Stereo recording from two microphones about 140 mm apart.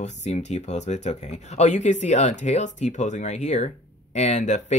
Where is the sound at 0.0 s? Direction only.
55° left (ahead or behind).